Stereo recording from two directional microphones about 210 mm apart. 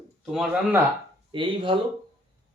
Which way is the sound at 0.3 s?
Centre (ahead or behind).